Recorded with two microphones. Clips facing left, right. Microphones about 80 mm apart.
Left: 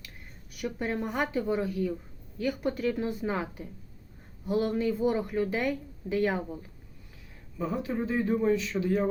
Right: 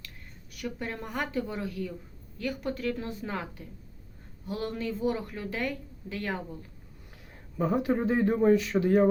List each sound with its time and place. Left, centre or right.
0.6 s speech: centre
7.6 s speech: right